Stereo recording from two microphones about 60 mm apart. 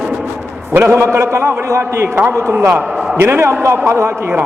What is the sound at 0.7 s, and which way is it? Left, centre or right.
A man's voice, right.